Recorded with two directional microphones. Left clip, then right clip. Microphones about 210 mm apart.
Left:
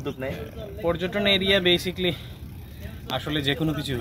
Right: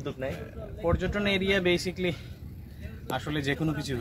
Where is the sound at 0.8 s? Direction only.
Centre (ahead or behind).